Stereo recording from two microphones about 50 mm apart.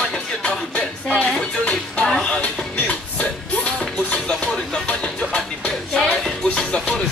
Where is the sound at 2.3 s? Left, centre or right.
Left.